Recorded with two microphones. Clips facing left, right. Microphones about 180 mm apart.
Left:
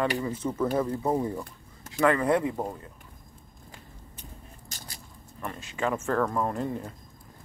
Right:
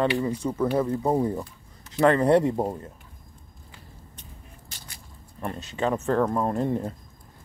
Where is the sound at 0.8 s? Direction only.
25° right (ahead or behind).